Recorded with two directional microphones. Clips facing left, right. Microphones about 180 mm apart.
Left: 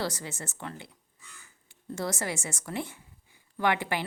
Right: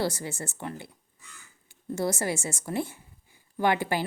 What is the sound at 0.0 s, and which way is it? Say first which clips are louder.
Speech: right 4 dB; 30° right (ahead or behind).